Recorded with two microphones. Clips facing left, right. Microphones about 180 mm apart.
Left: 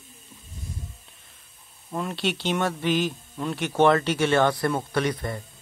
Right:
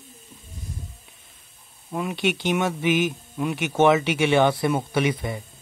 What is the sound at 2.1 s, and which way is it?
A man's voice, 15° right (ahead or behind).